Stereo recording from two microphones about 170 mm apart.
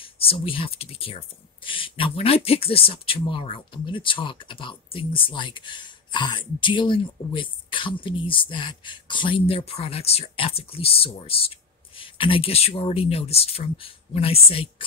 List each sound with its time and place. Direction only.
0.0 s speech: 35° left (ahead or behind)